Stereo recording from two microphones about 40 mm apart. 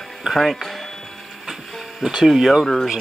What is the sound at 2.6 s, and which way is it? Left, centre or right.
Speech, centre.